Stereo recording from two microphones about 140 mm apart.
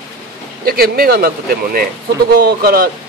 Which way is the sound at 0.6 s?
90° right.